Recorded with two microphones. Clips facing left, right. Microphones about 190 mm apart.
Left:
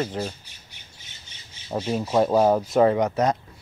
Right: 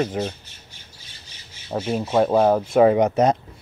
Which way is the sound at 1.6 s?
5° right (ahead or behind).